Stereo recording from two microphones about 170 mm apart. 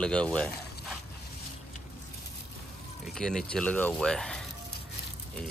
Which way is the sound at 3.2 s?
5° left (ahead or behind).